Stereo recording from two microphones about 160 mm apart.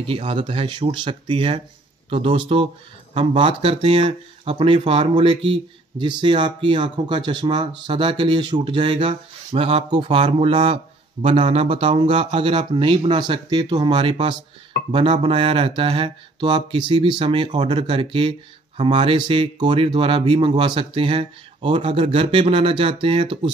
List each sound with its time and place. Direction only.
0.0 s speech: 35° right (ahead or behind)